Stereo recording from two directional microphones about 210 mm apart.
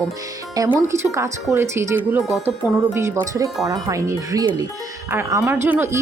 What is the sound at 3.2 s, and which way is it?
Speech, 15° right (ahead or behind).